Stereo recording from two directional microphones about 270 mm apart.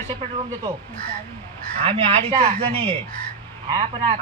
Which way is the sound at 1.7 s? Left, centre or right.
Centre.